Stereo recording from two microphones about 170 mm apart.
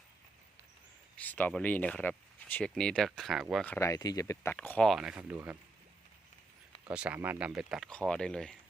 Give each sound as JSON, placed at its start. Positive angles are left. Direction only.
{"t": 1.1, "sound": "speech", "side_deg": 10}
{"t": 3.7, "sound": "speech", "side_deg": 15}
{"t": 4.9, "sound": "speech", "side_deg": -5}
{"t": 6.8, "sound": "speech", "side_deg": -10}